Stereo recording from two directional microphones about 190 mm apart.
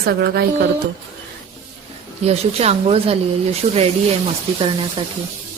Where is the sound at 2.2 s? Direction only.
35° right (ahead or behind).